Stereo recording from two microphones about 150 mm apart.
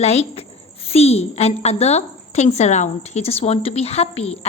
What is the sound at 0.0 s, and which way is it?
Speech, 45° left (ahead or behind).